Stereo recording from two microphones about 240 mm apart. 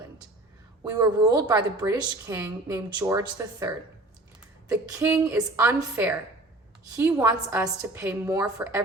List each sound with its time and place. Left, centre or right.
0.9 s a woman's voice: centre